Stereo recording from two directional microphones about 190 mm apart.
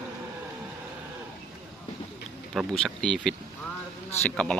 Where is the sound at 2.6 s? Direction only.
5° left (ahead or behind).